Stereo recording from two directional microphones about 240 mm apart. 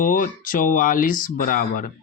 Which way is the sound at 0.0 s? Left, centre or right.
Left.